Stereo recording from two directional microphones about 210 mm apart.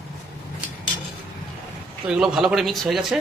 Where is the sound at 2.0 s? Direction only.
5° right (ahead or behind).